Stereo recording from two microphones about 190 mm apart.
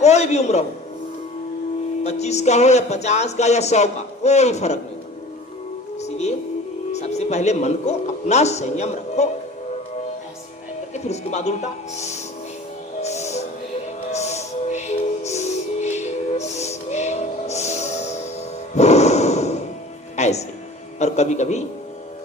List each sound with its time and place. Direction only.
0.0 s a man's voice: 35° left (ahead or behind)
2.0 s speech: 35° left (ahead or behind)
6.0 s music: 35° left (ahead or behind)
6.9 s a man's voice: 35° left (ahead or behind)
10.9 s speech: 35° left (ahead or behind)
13.0 s music: 35° left (ahead or behind)
18.7 s snort: 35° left (ahead or behind)
20.1 s music: 35° left (ahead or behind)
21.0 s a man's voice: 35° left (ahead or behind)